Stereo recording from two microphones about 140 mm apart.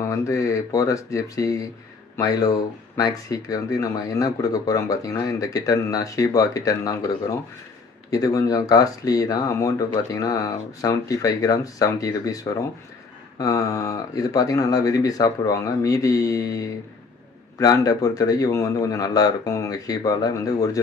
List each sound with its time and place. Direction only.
0.0 s speech: 20° left (ahead or behind)